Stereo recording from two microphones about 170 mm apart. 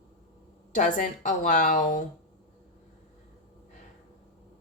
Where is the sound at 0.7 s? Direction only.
50° left (ahead or behind).